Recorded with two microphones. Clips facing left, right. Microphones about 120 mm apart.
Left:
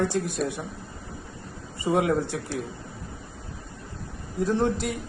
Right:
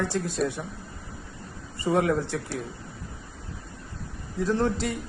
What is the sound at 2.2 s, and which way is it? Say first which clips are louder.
Speech: left 1 dB; 15° left (ahead or behind).